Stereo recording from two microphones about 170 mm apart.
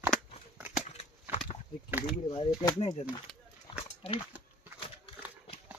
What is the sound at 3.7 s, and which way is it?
Horse, 30° left (ahead or behind).